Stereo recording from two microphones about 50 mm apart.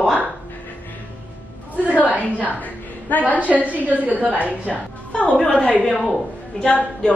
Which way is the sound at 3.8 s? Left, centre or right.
Right.